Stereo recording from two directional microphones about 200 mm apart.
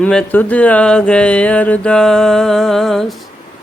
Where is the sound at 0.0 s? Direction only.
5° left (ahead or behind).